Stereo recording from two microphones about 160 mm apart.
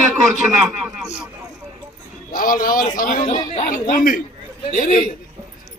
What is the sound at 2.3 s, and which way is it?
Speech, 60° left (ahead or behind).